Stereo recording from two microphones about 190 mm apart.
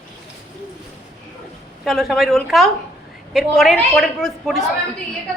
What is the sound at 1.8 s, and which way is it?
A woman's voice, centre (ahead or behind).